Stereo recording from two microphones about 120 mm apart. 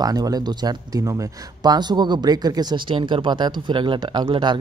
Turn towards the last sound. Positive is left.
turn(degrees=-40)  # may be behind; listen again after turning